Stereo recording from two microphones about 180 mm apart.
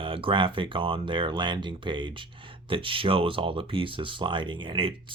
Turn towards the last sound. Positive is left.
turn(degrees=-30)  # may be behind; listen again after turning